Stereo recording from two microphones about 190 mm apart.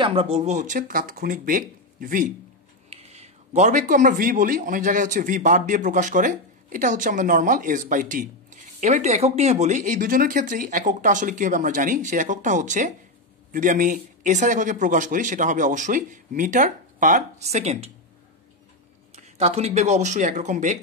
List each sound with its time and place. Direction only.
0.0 s a man's voice: 30° right (ahead or behind); by 2.2 s 45° right (ahead or behind)
2.9 s a man's voice: 35° right (ahead or behind)
19.1 s speech: 35° right (ahead or behind)